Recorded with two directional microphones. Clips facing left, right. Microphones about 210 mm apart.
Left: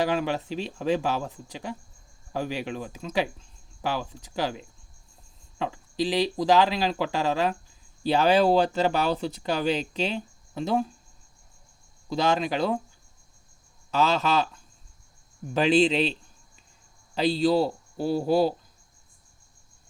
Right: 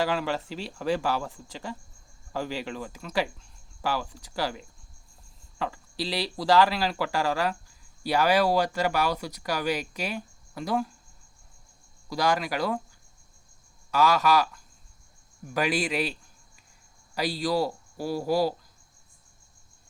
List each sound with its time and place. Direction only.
0.0 s speech: 20° left (ahead or behind)
12.0 s speech: 25° left (ahead or behind)
13.9 s speech: 25° left (ahead or behind)
17.2 s speech: 25° left (ahead or behind)